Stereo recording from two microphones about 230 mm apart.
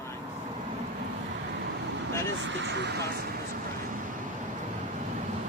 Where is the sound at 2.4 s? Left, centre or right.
Right.